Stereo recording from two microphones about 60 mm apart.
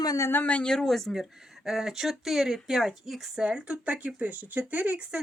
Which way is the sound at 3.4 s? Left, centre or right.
Centre.